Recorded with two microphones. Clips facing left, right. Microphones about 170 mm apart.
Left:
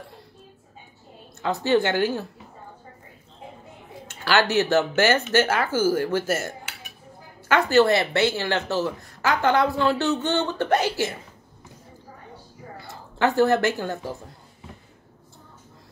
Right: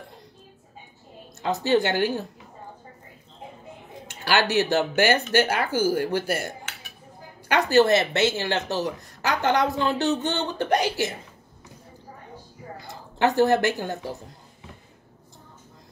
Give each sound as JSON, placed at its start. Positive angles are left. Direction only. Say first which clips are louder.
{"t": 1.7, "sound": "speech", "louder": "left 1 dB", "side_deg": -15}
{"t": 4.1, "sound": "speech", "louder": "left 1 dB", "side_deg": -15}
{"t": 12.7, "sound": "a sound", "louder": "left 1 dB", "side_deg": -20}
{"t": 13.4, "sound": "speech", "louder": "left 1 dB", "side_deg": -15}